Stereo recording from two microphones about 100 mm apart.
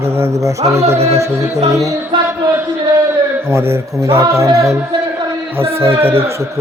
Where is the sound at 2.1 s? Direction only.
55° right (ahead or behind).